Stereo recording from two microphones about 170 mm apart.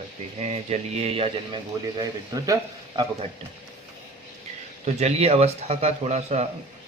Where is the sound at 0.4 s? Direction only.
40° right (ahead or behind).